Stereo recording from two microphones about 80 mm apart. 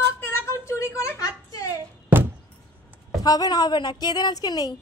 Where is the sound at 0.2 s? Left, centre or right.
Left.